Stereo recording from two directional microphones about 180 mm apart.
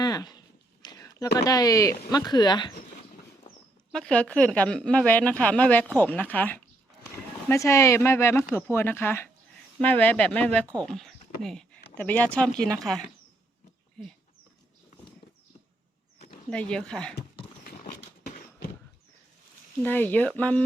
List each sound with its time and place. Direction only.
0.0 s a sound: 20° left (ahead or behind)
1.4 s speech: 20° left (ahead or behind)
3.9 s speech: 5° left (ahead or behind)
16.5 s speech: 5° left (ahead or behind)
17.6 s a sound: 50° left (ahead or behind)
19.8 s speech: 10° left (ahead or behind)